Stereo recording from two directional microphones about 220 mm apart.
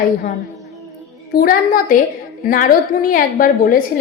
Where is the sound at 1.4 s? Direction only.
40° left (ahead or behind).